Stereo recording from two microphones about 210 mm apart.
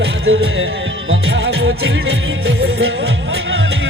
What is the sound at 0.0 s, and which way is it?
Music, 75° right (ahead or behind).